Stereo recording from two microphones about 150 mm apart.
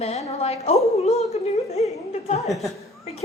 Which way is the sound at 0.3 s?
45° left (ahead or behind).